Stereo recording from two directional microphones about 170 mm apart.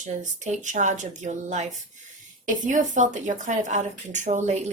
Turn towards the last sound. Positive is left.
turn(degrees=-45)  # may be behind; listen again after turning